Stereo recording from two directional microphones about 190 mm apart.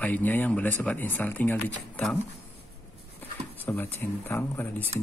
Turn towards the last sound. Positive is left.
turn(degrees=10)  # may be behind; listen again after turning